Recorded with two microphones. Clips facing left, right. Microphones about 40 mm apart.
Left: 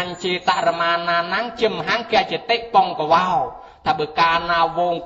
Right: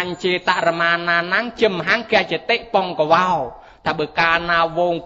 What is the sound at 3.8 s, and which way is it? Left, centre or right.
A man's voice, right.